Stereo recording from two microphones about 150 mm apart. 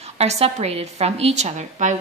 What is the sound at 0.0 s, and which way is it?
A woman's voice, 45° right (ahead or behind).